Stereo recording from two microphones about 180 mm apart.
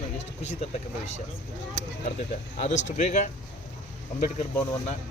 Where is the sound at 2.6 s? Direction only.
40° left (ahead or behind).